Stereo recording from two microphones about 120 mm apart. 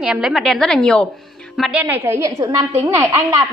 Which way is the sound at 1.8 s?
20° right (ahead or behind).